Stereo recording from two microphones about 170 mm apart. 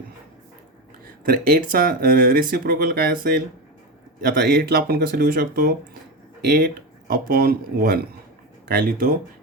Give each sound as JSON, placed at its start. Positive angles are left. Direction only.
{"t": 1.2, "sound": "speech", "side_deg": -60}
{"t": 7.1, "sound": "speech", "side_deg": -60}